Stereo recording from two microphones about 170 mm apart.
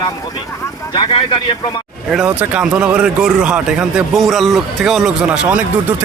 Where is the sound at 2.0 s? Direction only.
5° right (ahead or behind).